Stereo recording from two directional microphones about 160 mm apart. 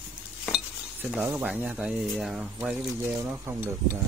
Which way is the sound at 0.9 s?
10° right (ahead or behind).